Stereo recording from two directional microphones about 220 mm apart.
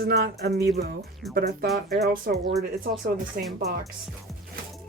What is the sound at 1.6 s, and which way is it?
Speech, centre (ahead or behind).